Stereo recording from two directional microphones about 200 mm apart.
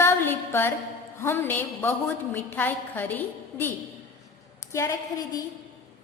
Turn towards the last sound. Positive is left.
turn(degrees=15)  # may be behind; listen again after turning